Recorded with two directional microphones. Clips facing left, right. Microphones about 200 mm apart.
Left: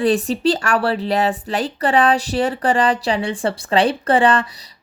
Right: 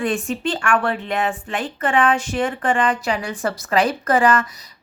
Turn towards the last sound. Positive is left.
turn(degrees=30)  # may be behind; listen again after turning